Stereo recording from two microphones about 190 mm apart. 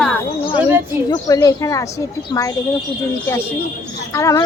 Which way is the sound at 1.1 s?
20° left (ahead or behind).